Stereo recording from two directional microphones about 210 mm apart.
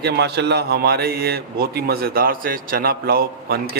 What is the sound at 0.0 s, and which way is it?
A man's voice, 50° right (ahead or behind).